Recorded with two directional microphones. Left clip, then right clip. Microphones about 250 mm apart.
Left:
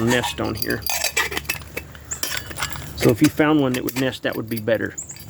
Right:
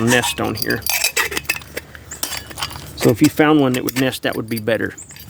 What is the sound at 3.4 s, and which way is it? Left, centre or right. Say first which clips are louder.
Speech: right 4 dB; right.